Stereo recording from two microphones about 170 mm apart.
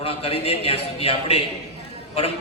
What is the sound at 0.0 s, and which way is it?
A man's voice, 35° left (ahead or behind).